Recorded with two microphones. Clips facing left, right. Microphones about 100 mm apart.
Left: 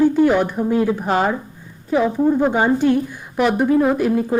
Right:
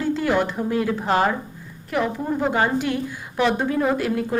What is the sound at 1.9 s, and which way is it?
A woman's voice, 20° left (ahead or behind).